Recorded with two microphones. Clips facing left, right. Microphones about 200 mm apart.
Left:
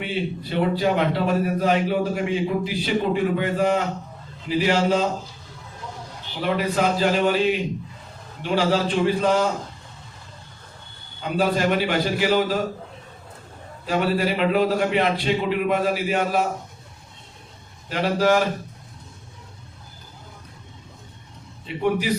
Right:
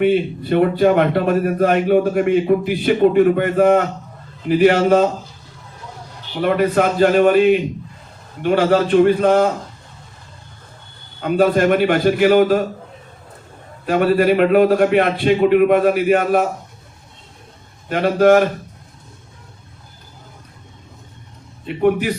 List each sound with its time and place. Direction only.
0.0 s a man's voice: 55° right (ahead or behind)
6.4 s a man's voice: 55° right (ahead or behind)
11.2 s a man's voice: 55° right (ahead or behind)
13.8 s a man's voice: 60° right (ahead or behind)
17.8 s a man's voice: 55° right (ahead or behind)
21.8 s a man's voice: 55° right (ahead or behind)